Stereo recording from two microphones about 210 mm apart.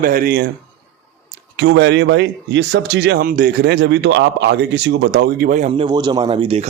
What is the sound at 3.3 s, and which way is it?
A man's voice, 40° right (ahead or behind).